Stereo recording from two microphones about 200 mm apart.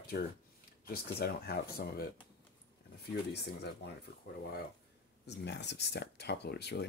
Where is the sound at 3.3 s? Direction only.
55° left (ahead or behind).